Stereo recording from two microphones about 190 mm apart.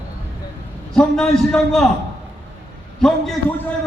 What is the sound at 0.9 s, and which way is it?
Speech, centre (ahead or behind).